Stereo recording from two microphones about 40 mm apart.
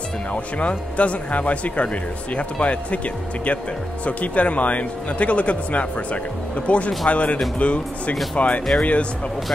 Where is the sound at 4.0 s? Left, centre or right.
Left.